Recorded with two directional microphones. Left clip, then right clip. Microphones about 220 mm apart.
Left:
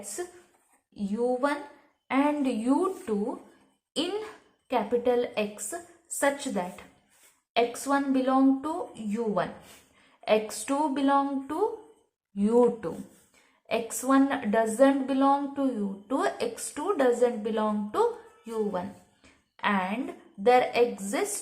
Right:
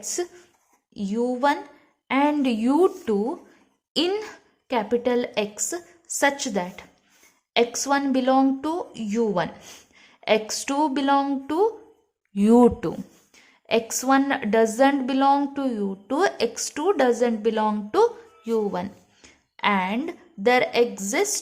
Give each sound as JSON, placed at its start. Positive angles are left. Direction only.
{"t": 0.9, "sound": "a woman's voice", "side_deg": -40}